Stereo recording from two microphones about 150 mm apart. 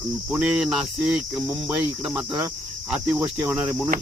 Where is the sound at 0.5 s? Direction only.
Centre (ahead or behind).